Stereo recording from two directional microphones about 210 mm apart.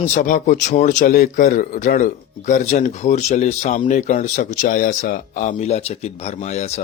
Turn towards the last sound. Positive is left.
turn(degrees=30)  # may be behind; listen again after turning